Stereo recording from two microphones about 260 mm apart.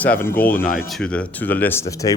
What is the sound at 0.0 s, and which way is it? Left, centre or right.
A man's voice, centre.